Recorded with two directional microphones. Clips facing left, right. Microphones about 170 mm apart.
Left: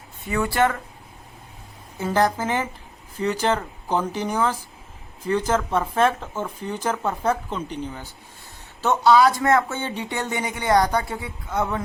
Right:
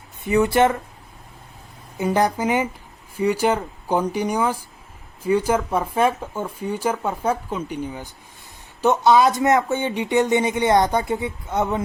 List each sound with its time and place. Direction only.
0.3 s speech: 20° right (ahead or behind)
2.0 s speech: 15° right (ahead or behind)